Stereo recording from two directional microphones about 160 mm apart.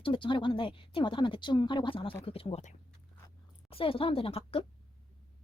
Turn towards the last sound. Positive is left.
turn(degrees=35)  # may be behind; listen again after turning